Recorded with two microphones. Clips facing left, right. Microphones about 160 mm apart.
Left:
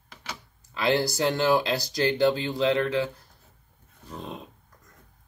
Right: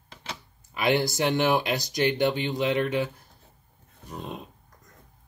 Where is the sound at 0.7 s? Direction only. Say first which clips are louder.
Even; 20° right (ahead or behind).